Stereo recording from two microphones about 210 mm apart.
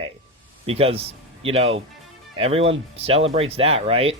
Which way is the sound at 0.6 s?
25° right (ahead or behind).